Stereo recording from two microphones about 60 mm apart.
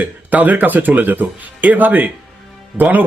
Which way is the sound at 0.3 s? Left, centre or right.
Right.